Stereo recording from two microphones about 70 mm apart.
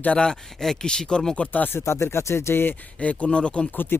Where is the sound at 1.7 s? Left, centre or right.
Left.